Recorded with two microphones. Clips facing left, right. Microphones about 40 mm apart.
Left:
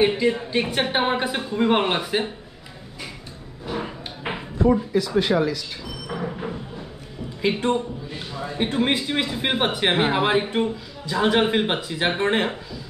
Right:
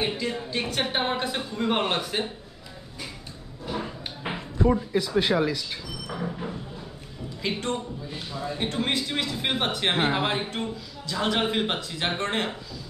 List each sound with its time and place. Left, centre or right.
0.0 s a man's voice: left
3.6 s a sound: centre
4.9 s speech: left
6.1 s a man's voice: left